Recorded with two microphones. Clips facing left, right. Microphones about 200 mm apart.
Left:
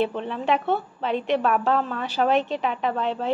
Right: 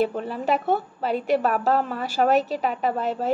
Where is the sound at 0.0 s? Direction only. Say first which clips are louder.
Right 1 dB; 5° right (ahead or behind).